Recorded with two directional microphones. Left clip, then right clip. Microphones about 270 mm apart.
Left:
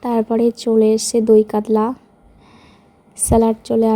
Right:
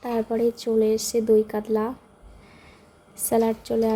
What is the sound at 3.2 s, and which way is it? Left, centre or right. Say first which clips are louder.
Speech: left 7 dB; left.